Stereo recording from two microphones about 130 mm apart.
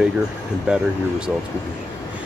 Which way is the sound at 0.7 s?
10° right (ahead or behind).